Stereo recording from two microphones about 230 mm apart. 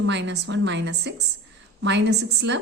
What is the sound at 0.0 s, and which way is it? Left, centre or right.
A woman's voice, right.